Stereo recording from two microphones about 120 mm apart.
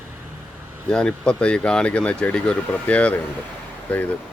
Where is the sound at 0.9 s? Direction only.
5° left (ahead or behind).